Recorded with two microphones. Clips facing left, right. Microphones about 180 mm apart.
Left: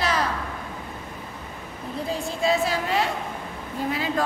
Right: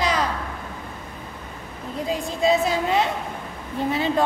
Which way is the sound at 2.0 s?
15° right (ahead or behind).